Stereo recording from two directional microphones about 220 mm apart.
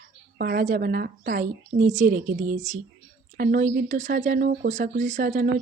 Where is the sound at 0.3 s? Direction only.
40° right (ahead or behind).